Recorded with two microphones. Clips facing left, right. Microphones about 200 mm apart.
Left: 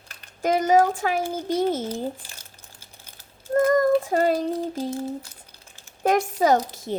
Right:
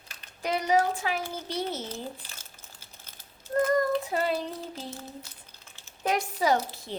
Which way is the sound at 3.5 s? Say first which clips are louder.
Left 6 dB; 45° left (ahead or behind).